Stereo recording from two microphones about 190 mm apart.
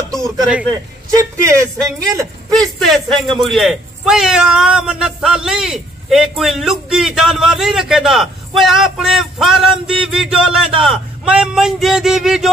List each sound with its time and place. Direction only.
0.1 s speech: 5° right (ahead or behind)
1.1 s speech: 20° right (ahead or behind)
2.8 s speech: centre (ahead or behind)